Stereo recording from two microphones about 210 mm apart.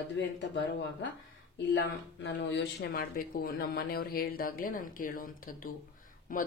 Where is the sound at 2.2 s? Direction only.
55° left (ahead or behind); by 6.4 s 40° left (ahead or behind).